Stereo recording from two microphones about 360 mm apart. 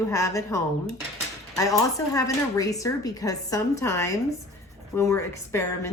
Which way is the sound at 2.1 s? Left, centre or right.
Centre.